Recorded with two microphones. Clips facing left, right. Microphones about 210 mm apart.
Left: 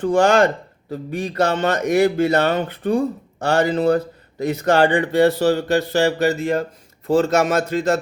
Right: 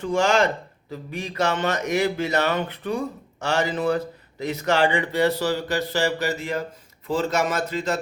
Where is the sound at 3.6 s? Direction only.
35° left (ahead or behind).